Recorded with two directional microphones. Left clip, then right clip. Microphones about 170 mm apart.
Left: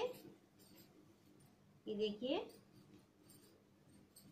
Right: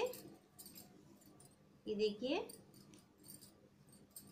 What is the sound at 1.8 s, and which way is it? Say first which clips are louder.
Speech: right 3 dB; 15° right (ahead or behind).